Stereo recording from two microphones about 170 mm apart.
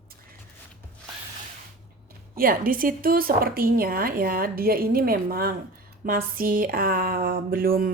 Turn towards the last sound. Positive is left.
turn(degrees=-60)  # may be behind; listen again after turning